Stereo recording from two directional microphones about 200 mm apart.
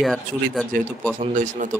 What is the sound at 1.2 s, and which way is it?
Speech, 40° right (ahead or behind).